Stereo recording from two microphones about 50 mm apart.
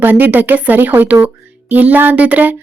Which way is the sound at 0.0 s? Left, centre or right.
Right.